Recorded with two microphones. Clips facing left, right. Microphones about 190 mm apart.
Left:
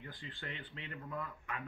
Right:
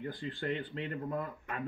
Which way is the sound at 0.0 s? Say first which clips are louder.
Right 11 dB; 40° right (ahead or behind).